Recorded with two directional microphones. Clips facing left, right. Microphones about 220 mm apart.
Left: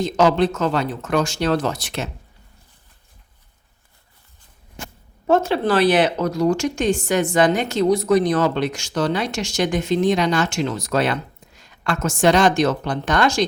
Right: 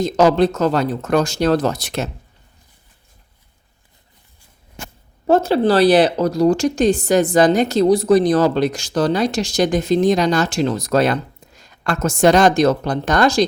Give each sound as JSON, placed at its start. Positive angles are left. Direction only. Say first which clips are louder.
{"t": 0.0, "sound": "speech", "louder": "right 3 dB", "side_deg": -40}
{"t": 5.2, "sound": "speech", "louder": "right 4 dB", "side_deg": -35}